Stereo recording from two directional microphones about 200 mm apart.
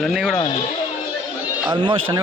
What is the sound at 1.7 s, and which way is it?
Speech, 25° right (ahead or behind).